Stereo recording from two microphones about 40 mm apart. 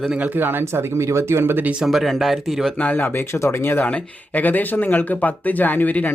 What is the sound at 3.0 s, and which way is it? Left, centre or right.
Speech, left.